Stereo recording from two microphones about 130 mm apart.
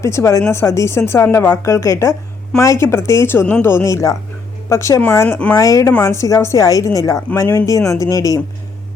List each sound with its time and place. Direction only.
0.0 s a woman's voice: 20° left (ahead or behind)
5.5 s a woman's voice: 25° left (ahead or behind)